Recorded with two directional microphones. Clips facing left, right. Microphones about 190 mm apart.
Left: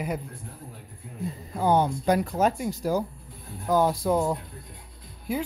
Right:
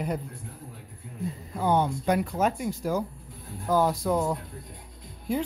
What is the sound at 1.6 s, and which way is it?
Speech, 40° left (ahead or behind).